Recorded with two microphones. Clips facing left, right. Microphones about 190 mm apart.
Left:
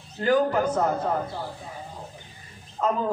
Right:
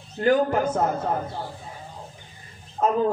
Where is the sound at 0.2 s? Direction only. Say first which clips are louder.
Right 1 dB; 50° right (ahead or behind).